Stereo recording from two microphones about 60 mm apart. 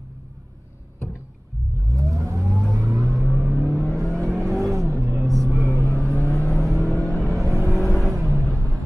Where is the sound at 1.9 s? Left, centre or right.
Right.